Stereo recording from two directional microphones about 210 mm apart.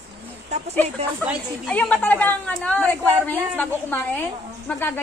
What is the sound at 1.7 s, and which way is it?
A woman's voice, 5° left (ahead or behind).